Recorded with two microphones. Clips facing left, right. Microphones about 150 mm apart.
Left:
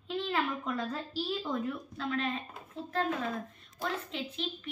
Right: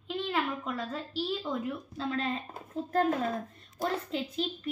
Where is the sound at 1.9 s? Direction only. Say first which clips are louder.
Right 2 dB; 30° right (ahead or behind).